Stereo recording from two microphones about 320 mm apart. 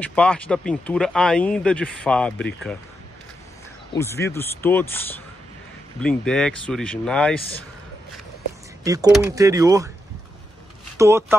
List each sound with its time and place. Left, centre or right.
0.0 s speech: centre
3.9 s speech: centre
8.8 s speech: centre
11.0 s speech: centre